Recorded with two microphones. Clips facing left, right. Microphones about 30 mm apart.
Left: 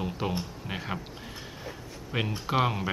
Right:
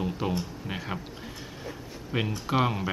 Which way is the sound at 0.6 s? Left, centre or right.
Centre.